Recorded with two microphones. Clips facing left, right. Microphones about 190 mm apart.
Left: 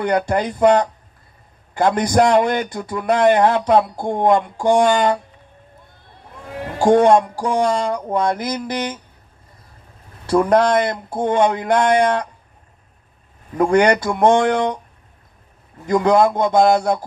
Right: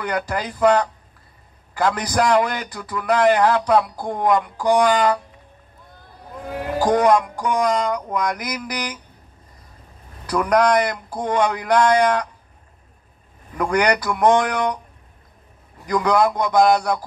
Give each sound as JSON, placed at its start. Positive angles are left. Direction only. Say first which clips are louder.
{"t": 0.0, "sound": "a man's voice", "louder": "left 6 dB", "side_deg": 25}
{"t": 6.8, "sound": "a man's voice", "louder": "left 4 dB", "side_deg": 25}
{"t": 10.2, "sound": "a man's voice", "louder": "left 3 dB", "side_deg": 25}
{"t": 13.6, "sound": "a man's voice", "louder": "left 5 dB", "side_deg": 25}
{"t": 15.8, "sound": "a man's voice", "louder": "left 4 dB", "side_deg": 25}